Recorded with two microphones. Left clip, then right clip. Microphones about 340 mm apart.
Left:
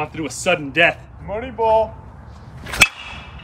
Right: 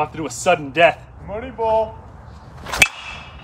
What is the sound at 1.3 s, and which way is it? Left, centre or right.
Speech, left.